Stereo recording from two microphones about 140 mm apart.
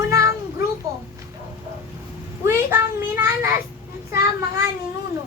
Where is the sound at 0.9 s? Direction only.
25° right (ahead or behind).